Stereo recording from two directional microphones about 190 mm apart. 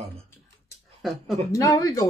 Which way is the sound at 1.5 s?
15° left (ahead or behind).